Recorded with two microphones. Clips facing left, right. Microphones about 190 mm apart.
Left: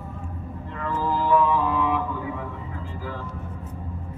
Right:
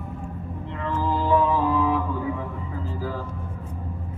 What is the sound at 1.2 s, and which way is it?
Music, 25° right (ahead or behind).